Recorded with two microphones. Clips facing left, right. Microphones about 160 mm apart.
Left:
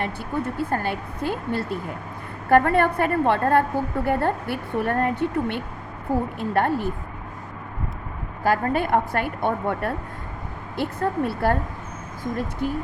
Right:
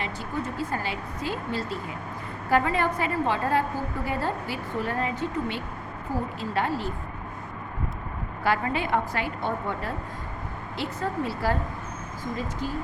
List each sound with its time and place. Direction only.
0.0 s speech: 60° left (ahead or behind)
8.4 s a woman's voice: 50° left (ahead or behind)